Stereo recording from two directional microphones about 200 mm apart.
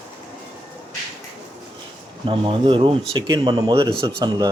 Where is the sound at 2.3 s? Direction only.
25° right (ahead or behind).